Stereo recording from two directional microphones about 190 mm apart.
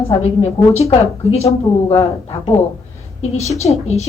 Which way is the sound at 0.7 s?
35° left (ahead or behind).